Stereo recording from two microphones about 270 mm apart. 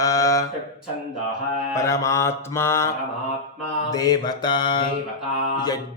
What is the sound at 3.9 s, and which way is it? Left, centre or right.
Mantra, centre.